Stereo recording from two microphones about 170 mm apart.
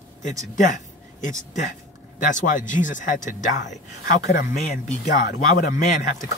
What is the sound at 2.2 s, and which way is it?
Speech, 50° left (ahead or behind).